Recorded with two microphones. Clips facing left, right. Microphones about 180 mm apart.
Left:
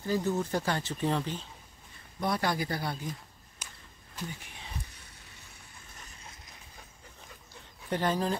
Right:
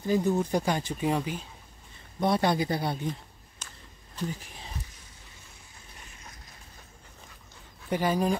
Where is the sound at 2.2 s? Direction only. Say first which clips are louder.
Right 5 dB; 25° right (ahead or behind).